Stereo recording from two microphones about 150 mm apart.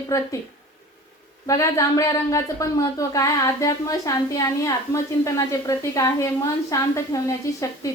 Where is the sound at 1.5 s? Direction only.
20° left (ahead or behind).